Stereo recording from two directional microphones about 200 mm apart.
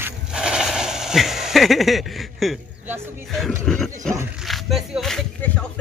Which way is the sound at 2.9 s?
Centre (ahead or behind).